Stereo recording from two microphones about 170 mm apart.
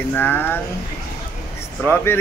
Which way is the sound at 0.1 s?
10° left (ahead or behind).